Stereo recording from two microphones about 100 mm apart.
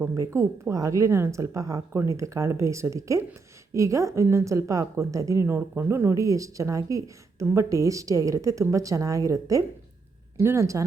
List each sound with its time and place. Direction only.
0.0 s a woman's voice: 30° right (ahead or behind)